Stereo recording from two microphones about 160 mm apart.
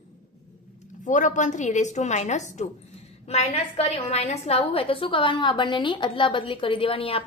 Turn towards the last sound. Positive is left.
turn(degrees=35)  # may be behind; listen again after turning